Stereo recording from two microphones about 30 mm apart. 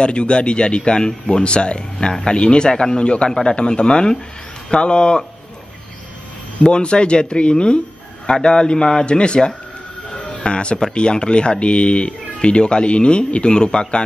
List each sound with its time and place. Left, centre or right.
0.0 s speech: left
6.6 s speech: left